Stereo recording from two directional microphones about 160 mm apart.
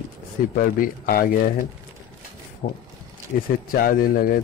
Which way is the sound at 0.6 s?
65° left (ahead or behind).